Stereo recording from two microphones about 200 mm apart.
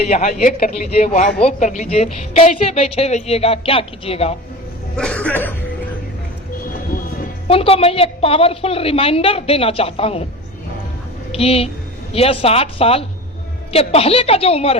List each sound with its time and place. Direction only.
0.1 s a man's voice: 35° left (ahead or behind)
4.9 s cough: 5° left (ahead or behind)
7.4 s a woman's voice: 30° left (ahead or behind)
11.3 s a woman's voice: 30° left (ahead or behind)